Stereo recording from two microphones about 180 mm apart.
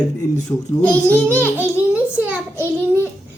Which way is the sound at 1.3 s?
10° right (ahead or behind).